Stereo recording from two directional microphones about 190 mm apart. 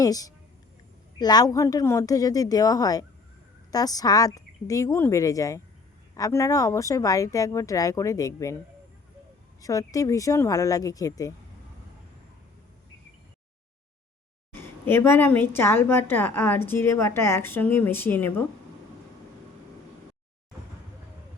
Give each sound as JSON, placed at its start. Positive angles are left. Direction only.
{"t": 0.0, "sound": "a woman's voice", "side_deg": 20}
{"t": 9.6, "sound": "a woman's voice", "side_deg": 15}
{"t": 14.5, "sound": "a woman's voice", "side_deg": 10}